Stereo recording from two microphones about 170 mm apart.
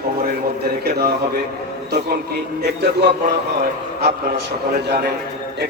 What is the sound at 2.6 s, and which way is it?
A man's voice, 70° right (ahead or behind).